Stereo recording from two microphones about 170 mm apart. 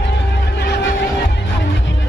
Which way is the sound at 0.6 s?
80° left.